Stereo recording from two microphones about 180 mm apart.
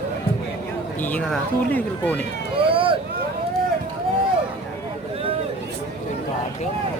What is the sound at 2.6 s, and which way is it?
Vehicle, 30° right (ahead or behind).